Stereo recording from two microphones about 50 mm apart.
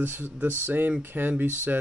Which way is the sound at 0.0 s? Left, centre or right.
Right.